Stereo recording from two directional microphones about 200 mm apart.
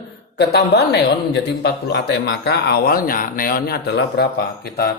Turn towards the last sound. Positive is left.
turn(degrees=55)  # may be behind; listen again after turning